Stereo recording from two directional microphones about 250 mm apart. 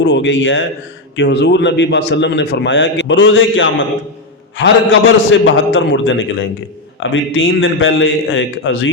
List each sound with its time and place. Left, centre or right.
0.0 s a man's voice: left